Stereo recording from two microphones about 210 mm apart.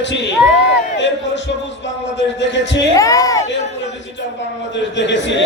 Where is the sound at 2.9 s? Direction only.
15° left (ahead or behind).